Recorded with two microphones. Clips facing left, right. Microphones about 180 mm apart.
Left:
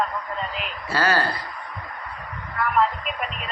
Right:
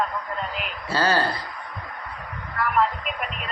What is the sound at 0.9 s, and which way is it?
Speech, 30° right (ahead or behind).